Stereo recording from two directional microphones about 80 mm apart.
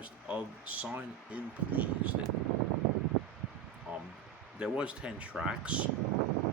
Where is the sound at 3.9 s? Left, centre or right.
Centre.